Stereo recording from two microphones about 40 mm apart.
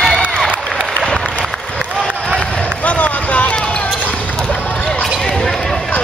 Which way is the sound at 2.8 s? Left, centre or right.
Left.